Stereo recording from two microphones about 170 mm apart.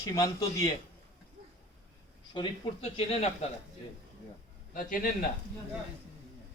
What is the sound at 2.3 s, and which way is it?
Speech, 30° left (ahead or behind).